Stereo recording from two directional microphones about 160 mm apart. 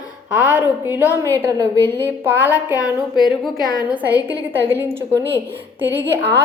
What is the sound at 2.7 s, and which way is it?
Speech, 25° left (ahead or behind).